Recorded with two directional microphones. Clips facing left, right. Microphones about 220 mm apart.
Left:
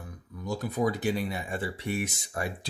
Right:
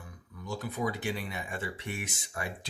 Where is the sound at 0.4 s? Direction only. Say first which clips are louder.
Left 5 dB; 40° left (ahead or behind).